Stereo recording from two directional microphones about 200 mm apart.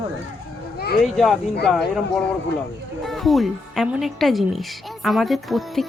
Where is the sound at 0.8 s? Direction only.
50° left (ahead or behind).